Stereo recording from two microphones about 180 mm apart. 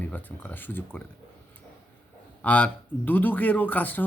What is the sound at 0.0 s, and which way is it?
Speech, 10° left (ahead or behind).